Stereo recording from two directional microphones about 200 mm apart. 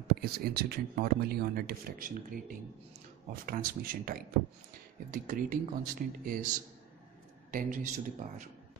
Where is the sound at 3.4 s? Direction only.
45° right (ahead or behind).